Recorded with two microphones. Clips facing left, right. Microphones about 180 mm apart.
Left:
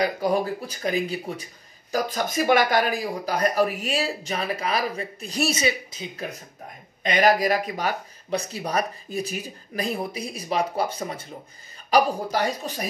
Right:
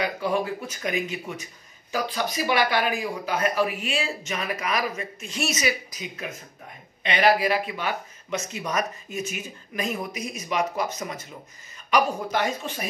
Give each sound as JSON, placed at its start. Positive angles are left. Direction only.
{"t": 0.0, "sound": "speech", "side_deg": 40}
{"t": 7.0, "sound": "speech", "side_deg": 45}